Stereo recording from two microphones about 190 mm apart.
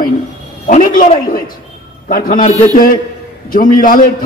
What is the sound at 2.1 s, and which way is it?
A man's voice, 50° left (ahead or behind).